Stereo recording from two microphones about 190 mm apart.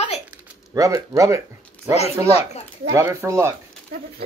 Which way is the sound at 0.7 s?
20° right (ahead or behind).